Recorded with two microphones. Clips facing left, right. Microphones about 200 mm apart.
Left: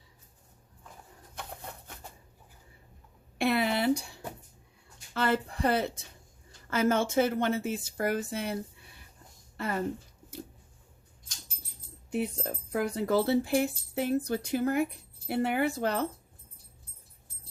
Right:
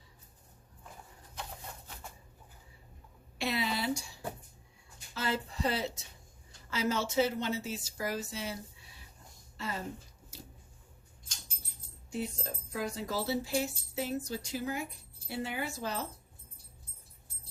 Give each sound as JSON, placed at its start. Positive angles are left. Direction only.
{"t": 3.3, "sound": "a sound", "side_deg": 55}
{"t": 5.1, "sound": "speech", "side_deg": 60}
{"t": 9.6, "sound": "speech", "side_deg": 60}
{"t": 12.1, "sound": "speech", "side_deg": 60}